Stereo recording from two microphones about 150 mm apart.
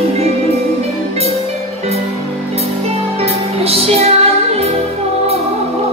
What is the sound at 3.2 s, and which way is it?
Music, 40° right (ahead or behind).